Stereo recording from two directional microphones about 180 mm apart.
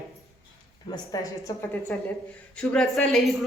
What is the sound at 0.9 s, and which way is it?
A woman's voice, 20° left (ahead or behind).